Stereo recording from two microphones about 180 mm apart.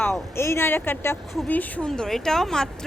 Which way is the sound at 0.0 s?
15° left (ahead or behind).